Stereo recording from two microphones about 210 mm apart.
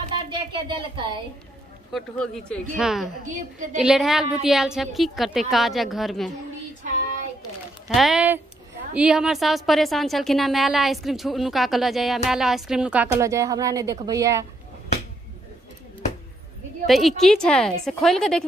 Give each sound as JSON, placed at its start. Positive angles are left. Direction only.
{"t": 0.1, "sound": "a sound", "side_deg": -25}
{"t": 1.9, "sound": "a woman's voice", "side_deg": 0}
{"t": 7.9, "sound": "a woman's voice", "side_deg": 0}
{"t": 16.8, "sound": "a woman's voice", "side_deg": 0}